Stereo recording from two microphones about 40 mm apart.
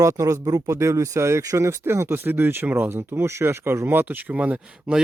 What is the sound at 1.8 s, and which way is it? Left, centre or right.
Speech, right.